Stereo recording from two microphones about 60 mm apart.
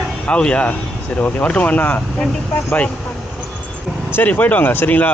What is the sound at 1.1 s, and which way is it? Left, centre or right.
Speech, left.